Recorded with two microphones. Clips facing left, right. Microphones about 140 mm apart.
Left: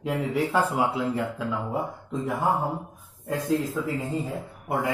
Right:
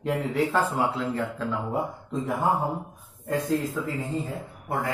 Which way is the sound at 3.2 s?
Centre (ahead or behind).